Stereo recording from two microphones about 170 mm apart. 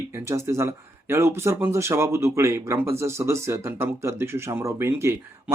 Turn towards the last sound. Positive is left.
turn(degrees=-15)  # may be behind; listen again after turning